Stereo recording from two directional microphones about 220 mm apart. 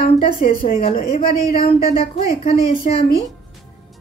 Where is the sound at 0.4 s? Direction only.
25° left (ahead or behind).